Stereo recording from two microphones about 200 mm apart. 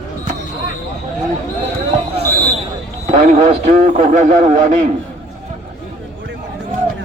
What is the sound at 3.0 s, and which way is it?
A man's voice, 35° right (ahead or behind).